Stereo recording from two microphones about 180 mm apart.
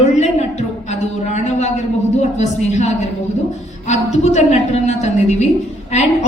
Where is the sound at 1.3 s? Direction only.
40° left (ahead or behind).